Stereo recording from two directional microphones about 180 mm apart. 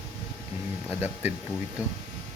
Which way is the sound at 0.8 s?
10° right (ahead or behind).